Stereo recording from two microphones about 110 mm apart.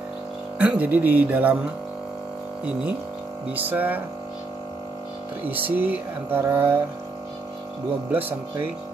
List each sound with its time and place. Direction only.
0.6 s speech: 10° right (ahead or behind)
3.5 s speech: 15° right (ahead or behind)
5.5 s music: 15° right (ahead or behind)
8.1 s speech: 20° right (ahead or behind)